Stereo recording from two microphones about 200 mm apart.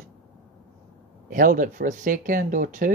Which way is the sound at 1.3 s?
45° right (ahead or behind).